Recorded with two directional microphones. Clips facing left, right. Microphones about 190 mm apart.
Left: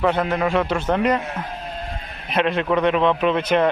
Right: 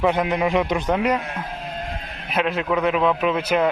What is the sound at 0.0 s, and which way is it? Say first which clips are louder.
A man's voice: even; 10° right (ahead or behind).